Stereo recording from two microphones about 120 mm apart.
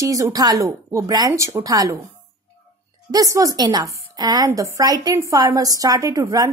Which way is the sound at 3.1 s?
30° right (ahead or behind).